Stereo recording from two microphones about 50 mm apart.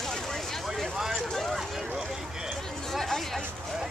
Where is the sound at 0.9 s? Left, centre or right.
Centre.